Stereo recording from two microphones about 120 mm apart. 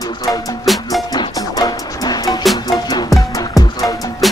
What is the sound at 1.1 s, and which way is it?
Music, 35° left (ahead or behind).